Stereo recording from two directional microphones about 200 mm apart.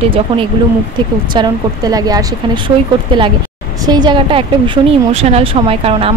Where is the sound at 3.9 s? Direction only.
20° right (ahead or behind).